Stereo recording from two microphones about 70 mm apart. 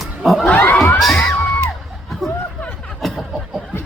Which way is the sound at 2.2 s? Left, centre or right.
Centre.